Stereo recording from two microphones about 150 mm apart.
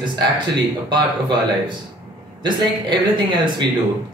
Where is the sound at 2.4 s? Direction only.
30° right (ahead or behind).